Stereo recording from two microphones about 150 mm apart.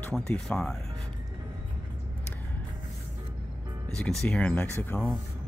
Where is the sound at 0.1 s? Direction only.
5° left (ahead or behind).